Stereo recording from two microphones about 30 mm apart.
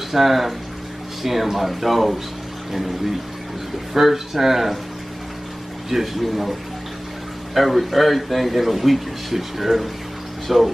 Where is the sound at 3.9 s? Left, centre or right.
Centre.